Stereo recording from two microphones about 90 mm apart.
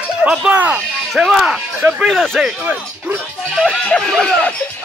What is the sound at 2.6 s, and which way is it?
Speech, 20° right (ahead or behind).